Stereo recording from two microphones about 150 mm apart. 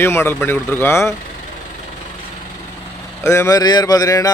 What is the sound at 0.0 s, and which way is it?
Speech, 15° left (ahead or behind).